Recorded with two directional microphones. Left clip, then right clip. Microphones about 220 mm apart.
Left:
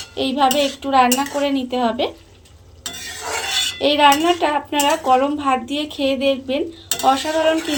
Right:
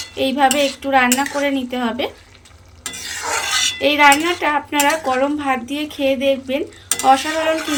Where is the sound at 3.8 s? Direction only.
Centre (ahead or behind).